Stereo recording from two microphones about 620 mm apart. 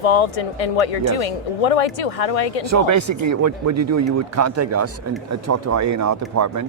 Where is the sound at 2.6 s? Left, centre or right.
Right.